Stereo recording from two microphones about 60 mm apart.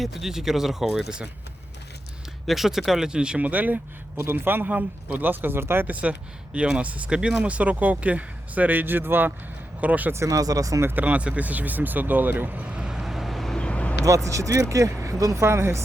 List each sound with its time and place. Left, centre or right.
0.0 s speech: centre
2.5 s speech: centre; by 3.8 s right
4.2 s speech: right
9.8 s speech: right
10.1 s speech: right
10.3 s speech: right
10.9 s speech: right; by 13.6 s centre
13.6 s vehicle: centre
14.0 s speech: right